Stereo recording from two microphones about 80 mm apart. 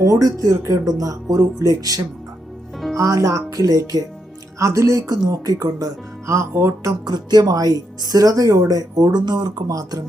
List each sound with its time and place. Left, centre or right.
0.3 s speech: right
3.0 s speech: right
7.0 s speech: right
9.6 s speech: right